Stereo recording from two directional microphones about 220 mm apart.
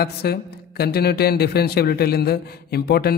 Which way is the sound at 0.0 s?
45° left (ahead or behind).